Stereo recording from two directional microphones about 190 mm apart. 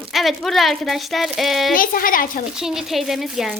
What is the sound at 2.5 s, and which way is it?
Speech, 5° right (ahead or behind).